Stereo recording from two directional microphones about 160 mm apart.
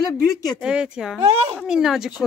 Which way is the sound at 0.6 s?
5° right (ahead or behind).